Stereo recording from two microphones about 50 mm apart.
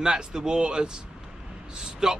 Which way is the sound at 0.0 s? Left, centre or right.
Centre.